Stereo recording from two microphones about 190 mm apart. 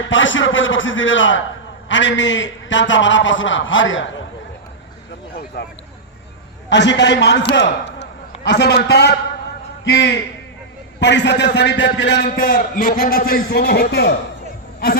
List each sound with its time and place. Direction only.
0.1 s a man's voice: 85° left
1.9 s a man's voice: 75° left (ahead or behind)
5.5 s a man's voice: 60° left (ahead or behind)